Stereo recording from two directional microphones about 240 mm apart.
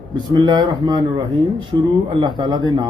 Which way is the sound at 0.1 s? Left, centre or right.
Centre.